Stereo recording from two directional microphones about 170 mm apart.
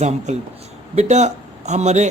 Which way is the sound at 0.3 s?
40° right (ahead or behind).